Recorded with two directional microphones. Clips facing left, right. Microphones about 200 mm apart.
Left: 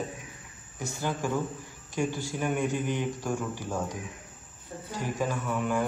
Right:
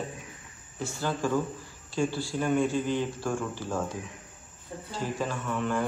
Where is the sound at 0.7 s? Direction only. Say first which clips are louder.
Right 1 dB; 15° left (ahead or behind).